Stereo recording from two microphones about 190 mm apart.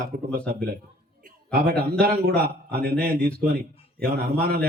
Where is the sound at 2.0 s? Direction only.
55° right (ahead or behind).